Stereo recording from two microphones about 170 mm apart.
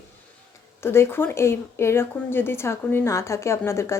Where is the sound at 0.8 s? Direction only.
15° left (ahead or behind).